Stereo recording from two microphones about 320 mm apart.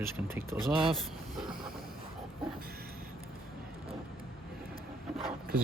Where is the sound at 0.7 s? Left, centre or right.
Centre.